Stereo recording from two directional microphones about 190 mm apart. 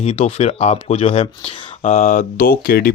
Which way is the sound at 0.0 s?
30° left (ahead or behind).